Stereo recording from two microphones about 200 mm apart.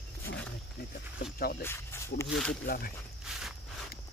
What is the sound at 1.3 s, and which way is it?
Speech, 50° left (ahead or behind).